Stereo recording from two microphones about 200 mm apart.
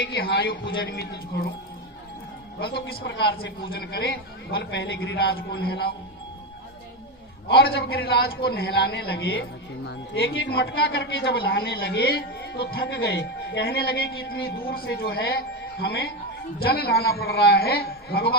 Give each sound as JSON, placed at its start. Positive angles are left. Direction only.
{"t": 0.1, "sound": "a man's voice", "side_deg": 55}
{"t": 2.6, "sound": "a man's voice", "side_deg": 50}
{"t": 7.5, "sound": "a man's voice", "side_deg": 55}